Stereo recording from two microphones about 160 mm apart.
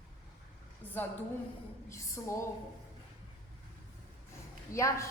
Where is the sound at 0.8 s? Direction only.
10° left (ahead or behind).